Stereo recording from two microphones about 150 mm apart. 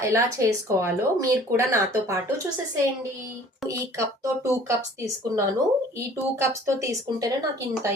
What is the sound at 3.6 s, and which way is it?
A woman's voice, 20° right (ahead or behind).